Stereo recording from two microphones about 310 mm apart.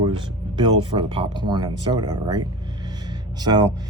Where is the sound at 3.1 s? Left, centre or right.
Centre.